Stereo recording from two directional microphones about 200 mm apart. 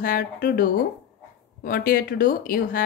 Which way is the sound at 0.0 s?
45° left (ahead or behind).